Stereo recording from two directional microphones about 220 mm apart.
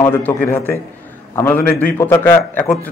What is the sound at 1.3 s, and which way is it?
A man's voice, 10° left (ahead or behind).